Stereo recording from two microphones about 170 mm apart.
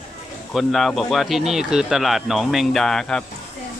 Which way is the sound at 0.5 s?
Centre (ahead or behind).